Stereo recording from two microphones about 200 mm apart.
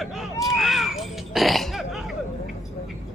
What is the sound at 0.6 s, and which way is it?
Cough, centre (ahead or behind).